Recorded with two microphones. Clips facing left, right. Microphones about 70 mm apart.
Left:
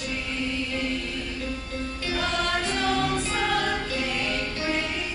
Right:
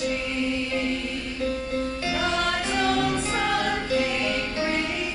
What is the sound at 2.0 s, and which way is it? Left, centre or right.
Music, centre.